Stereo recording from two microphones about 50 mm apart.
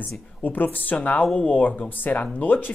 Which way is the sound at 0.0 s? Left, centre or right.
Left.